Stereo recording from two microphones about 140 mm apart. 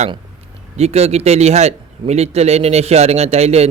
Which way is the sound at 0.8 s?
45° right (ahead or behind).